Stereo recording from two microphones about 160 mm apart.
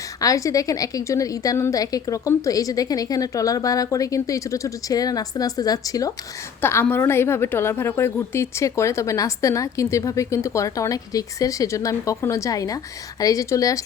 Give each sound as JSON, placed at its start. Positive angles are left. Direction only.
{"t": 0.2, "sound": "a woman's voice", "side_deg": 20}